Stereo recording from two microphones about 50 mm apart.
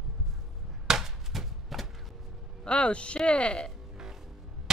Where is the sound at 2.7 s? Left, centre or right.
Left.